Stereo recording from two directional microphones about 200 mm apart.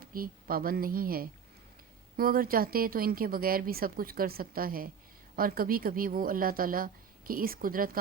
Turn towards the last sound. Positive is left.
turn(degrees=-45)  # may be behind; listen again after turning